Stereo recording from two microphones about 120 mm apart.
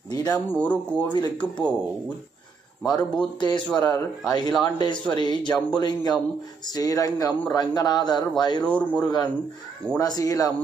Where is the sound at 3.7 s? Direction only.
25° left (ahead or behind).